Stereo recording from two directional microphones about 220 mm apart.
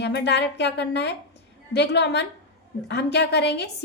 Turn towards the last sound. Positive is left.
turn(degrees=50)  # may be behind; listen again after turning